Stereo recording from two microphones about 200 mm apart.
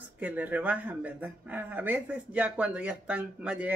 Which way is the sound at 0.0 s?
10° right (ahead or behind).